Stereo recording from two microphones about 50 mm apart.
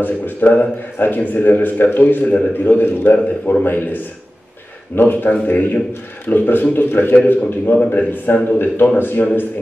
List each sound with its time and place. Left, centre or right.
0.5 s a man's voice: left